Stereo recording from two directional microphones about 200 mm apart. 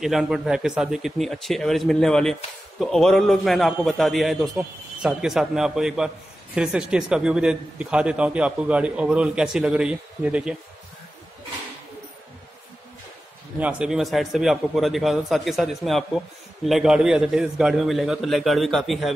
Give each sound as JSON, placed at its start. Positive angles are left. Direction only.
{"t": 0.0, "sound": "a man's voice", "side_deg": 0}
{"t": 13.6, "sound": "a man's voice", "side_deg": -5}